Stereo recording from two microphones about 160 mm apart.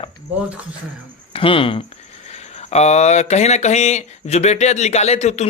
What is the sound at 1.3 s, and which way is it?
Speech, 35° left (ahead or behind).